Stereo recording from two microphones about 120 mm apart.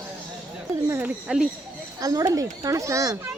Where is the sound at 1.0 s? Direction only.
5° right (ahead or behind).